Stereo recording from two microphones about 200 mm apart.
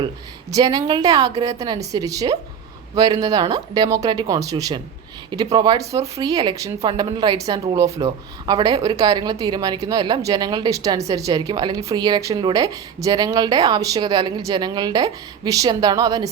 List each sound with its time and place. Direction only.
0.5 s speech: 20° right (ahead or behind)